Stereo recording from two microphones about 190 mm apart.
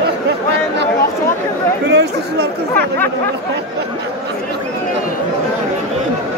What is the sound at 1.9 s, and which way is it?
Speech, 60° right (ahead or behind).